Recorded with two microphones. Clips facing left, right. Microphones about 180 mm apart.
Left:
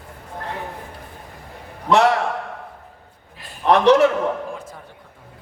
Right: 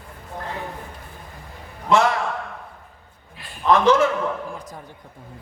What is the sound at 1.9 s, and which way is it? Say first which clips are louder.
Speech: left 3 dB; 70° left (ahead or behind).